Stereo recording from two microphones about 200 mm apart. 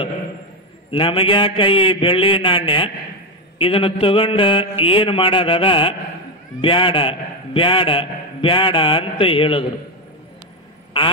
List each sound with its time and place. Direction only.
0.9 s a man's voice: 25° left (ahead or behind)